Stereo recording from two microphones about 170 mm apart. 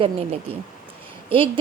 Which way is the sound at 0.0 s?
35° right (ahead or behind).